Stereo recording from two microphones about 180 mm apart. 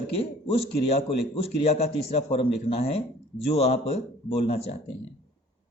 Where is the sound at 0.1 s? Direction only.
30° left (ahead or behind).